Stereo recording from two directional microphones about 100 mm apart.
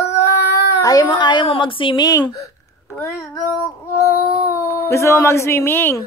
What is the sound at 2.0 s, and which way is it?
Speech, 35° left (ahead or behind).